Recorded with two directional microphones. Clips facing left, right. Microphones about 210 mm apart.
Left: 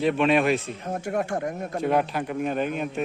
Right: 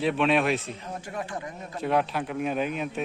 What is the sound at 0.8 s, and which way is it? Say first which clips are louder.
Speech: left 7 dB; 55° left (ahead or behind).